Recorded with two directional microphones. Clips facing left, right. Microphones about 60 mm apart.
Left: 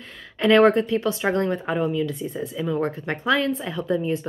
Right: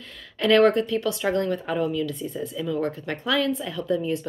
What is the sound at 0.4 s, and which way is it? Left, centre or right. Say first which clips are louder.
Speech: left 2 dB; left.